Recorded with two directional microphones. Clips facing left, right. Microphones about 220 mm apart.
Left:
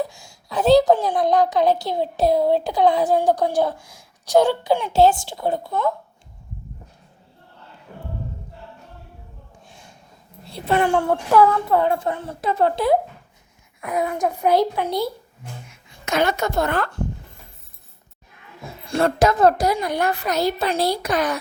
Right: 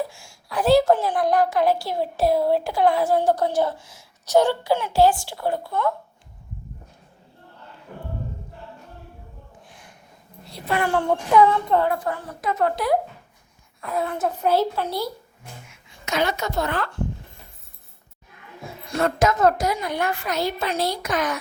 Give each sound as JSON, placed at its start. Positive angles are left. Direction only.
{"t": 0.1, "sound": "a woman's voice", "side_deg": 20}
{"t": 9.6, "sound": "gasp", "side_deg": 25}
{"t": 10.5, "sound": "a woman's voice", "side_deg": 25}
{"t": 11.8, "sound": "a woman's voice", "side_deg": 25}
{"t": 13.8, "sound": "a woman's voice", "side_deg": 15}
{"t": 15.7, "sound": "speech", "side_deg": 50}
{"t": 18.9, "sound": "a woman's voice", "side_deg": 30}